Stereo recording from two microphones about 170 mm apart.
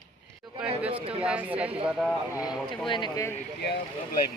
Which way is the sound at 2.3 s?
20° left (ahead or behind).